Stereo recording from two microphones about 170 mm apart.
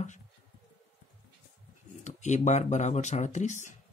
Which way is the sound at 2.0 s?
45° left (ahead or behind).